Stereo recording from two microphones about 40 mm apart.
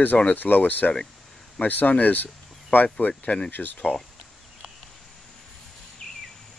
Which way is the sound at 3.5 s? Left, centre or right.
Left.